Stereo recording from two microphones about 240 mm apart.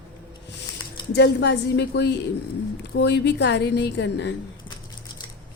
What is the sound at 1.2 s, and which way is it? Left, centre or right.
A woman's voice, left.